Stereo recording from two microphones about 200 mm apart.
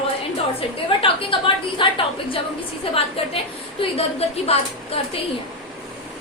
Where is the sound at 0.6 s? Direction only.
25° left (ahead or behind).